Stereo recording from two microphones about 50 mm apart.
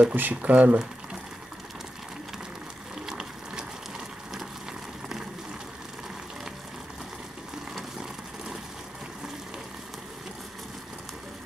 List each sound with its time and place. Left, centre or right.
0.0 s speech: right
0.5 s speech: right
3.1 s ratchet: centre